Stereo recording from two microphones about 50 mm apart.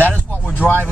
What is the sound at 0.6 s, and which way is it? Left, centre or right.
Speech, left.